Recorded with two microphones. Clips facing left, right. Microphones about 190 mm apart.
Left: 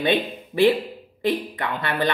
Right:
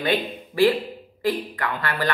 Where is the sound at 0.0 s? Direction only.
20° left (ahead or behind).